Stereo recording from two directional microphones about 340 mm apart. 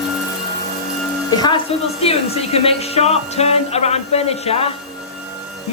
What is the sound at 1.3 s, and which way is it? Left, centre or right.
A woman's voice, centre.